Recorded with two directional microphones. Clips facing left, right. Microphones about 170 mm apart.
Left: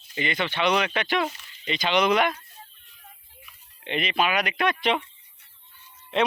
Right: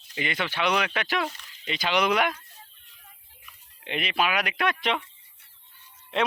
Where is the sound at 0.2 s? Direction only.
5° right (ahead or behind).